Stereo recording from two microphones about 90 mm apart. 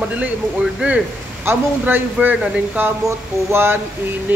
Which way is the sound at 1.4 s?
20° right (ahead or behind).